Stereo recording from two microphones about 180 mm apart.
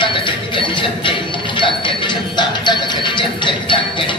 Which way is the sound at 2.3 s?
25° left (ahead or behind).